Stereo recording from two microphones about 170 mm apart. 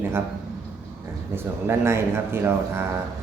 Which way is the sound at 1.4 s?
15° right (ahead or behind).